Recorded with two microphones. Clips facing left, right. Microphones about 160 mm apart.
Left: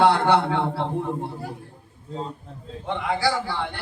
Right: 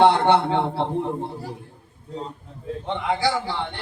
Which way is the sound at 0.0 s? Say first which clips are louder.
Right 2 dB; 25° right (ahead or behind).